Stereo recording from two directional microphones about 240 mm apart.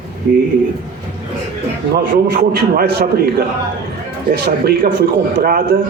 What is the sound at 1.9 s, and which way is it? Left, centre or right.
A man's voice, right.